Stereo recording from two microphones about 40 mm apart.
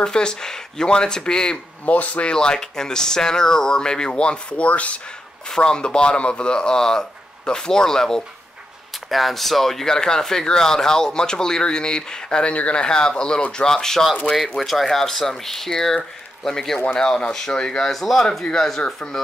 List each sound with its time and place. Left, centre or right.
0.0 s speech: left
1.9 s speech: left
2.3 s speech: centre; by 5.0 s left
5.6 s speech: left
9.1 s speech: centre